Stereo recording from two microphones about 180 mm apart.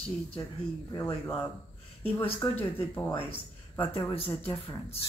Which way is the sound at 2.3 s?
10° left (ahead or behind).